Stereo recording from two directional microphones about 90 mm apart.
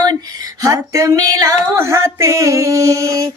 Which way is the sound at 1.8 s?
30° right (ahead or behind).